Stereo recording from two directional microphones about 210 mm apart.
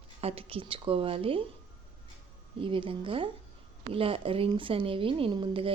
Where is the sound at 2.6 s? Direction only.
25° right (ahead or behind).